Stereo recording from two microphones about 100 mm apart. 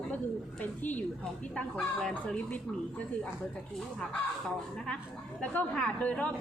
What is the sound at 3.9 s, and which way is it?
Speech, 10° left (ahead or behind).